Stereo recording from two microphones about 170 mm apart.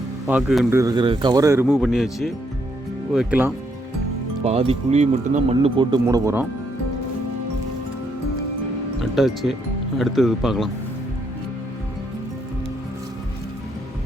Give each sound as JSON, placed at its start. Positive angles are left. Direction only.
{"t": 0.3, "sound": "a man's voice", "side_deg": 0}
{"t": 0.7, "sound": "speech", "side_deg": -20}
{"t": 1.6, "sound": "a man's voice", "side_deg": 0}
{"t": 4.4, "sound": "speech", "side_deg": -35}
{"t": 9.0, "sound": "a man's voice", "side_deg": 0}